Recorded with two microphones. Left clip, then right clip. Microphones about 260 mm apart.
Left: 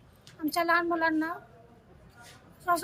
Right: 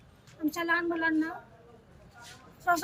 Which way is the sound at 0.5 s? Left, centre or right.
Centre.